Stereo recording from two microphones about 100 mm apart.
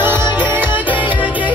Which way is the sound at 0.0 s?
20° right (ahead or behind).